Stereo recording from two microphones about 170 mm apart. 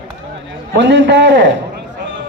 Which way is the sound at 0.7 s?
90° right.